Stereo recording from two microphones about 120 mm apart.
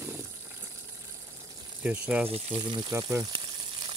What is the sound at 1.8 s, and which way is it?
Speech, 10° right (ahead or behind).